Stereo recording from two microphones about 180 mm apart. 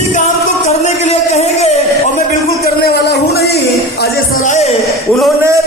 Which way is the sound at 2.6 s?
60° left (ahead or behind).